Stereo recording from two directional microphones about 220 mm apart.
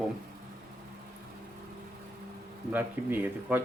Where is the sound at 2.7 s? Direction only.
10° right (ahead or behind).